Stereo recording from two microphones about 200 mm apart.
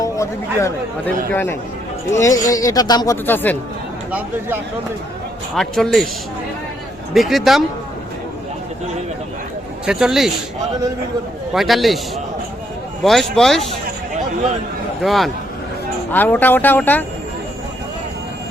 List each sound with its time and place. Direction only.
0.0 s speech: 15° left (ahead or behind)
4.1 s speech: 10° right (ahead or behind)
5.5 s speech: centre (ahead or behind)
7.1 s speech: centre (ahead or behind)
9.8 s speech: 5° right (ahead or behind)
11.5 s speech: centre (ahead or behind)
13.1 s speech: centre (ahead or behind)
15.0 s speech: centre (ahead or behind)